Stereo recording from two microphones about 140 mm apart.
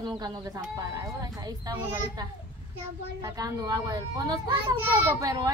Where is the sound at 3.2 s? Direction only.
25° right (ahead or behind).